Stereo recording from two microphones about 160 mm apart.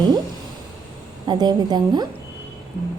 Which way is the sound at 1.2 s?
25° right (ahead or behind).